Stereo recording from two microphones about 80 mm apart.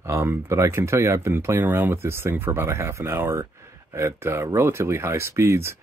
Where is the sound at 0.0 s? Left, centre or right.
Right.